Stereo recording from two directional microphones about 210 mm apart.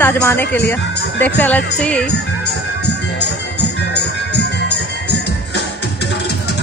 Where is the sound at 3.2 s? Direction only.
55° left (ahead or behind).